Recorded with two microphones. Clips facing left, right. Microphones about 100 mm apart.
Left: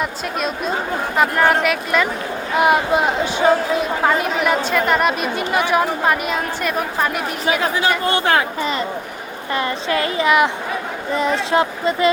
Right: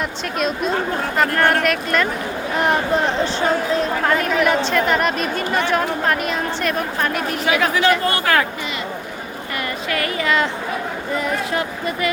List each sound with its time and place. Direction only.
0.0 s a woman's voice: centre (ahead or behind)
7.4 s speech: 30° left (ahead or behind)
9.6 s speech: 25° left (ahead or behind)